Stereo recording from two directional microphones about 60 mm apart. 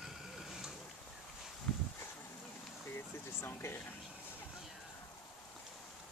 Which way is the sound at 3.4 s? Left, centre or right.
Left.